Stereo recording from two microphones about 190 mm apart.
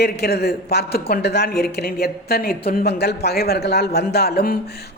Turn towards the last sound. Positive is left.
turn(degrees=55)  # may be behind; listen again after turning